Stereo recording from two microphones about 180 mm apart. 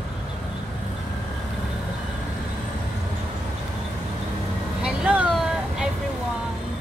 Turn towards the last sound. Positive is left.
turn(degrees=-5)  # may be behind; listen again after turning